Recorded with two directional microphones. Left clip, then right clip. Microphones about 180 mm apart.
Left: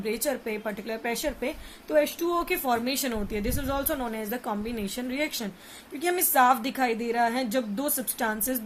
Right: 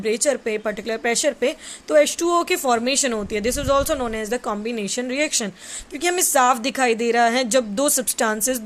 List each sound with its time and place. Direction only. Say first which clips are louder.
0.0 s speech: right 9 dB; 40° right (ahead or behind)